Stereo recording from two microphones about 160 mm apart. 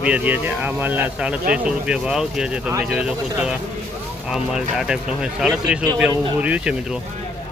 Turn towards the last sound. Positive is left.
turn(degrees=-5)  # may be behind; listen again after turning